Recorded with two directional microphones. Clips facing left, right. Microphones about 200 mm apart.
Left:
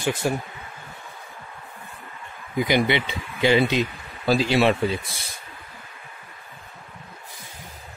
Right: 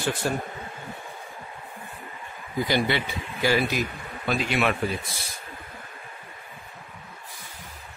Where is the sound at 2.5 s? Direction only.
15° left (ahead or behind).